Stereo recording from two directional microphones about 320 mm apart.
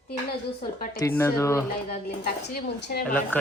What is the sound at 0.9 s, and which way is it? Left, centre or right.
Speech, centre.